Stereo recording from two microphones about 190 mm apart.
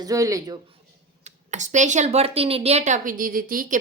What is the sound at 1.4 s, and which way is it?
A woman's voice, 40° right (ahead or behind).